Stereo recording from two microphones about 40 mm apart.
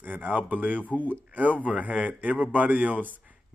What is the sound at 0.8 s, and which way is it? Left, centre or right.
Speech, left.